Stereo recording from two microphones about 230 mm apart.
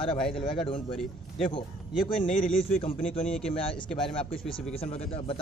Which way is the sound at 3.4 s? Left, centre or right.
Left.